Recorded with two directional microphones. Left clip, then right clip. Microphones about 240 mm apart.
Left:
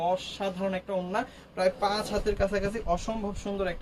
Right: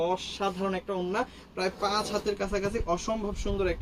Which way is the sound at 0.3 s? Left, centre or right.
Centre.